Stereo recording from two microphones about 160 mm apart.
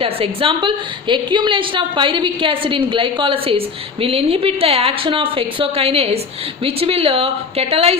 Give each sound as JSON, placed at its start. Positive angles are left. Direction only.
{"t": 0.0, "sound": "a woman's voice", "side_deg": -35}